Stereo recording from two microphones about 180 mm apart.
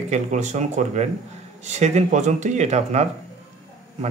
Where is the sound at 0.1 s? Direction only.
40° right (ahead or behind).